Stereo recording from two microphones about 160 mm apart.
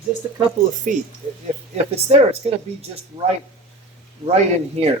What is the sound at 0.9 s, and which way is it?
Speech, 55° right (ahead or behind).